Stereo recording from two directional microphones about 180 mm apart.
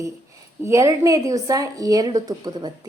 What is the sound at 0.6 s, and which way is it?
A woman's voice, 15° right (ahead or behind).